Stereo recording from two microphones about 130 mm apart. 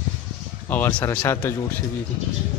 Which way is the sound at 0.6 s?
15° left (ahead or behind).